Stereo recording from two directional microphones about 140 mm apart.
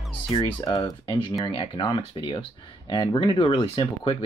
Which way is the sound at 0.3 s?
30° left (ahead or behind).